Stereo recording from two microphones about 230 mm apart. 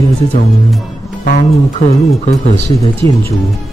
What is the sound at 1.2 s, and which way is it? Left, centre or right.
Speech, left.